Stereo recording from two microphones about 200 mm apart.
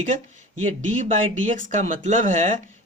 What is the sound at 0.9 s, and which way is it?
Speech, 40° right (ahead or behind).